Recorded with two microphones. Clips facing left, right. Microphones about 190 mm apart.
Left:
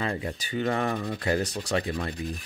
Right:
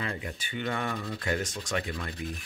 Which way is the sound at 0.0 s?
35° left (ahead or behind).